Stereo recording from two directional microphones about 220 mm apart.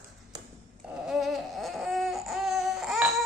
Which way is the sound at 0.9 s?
Centre (ahead or behind).